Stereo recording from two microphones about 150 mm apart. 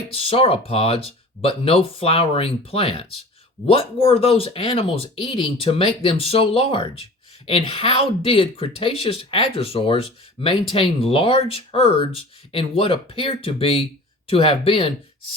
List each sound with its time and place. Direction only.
0.1 s speech: 40° left (ahead or behind)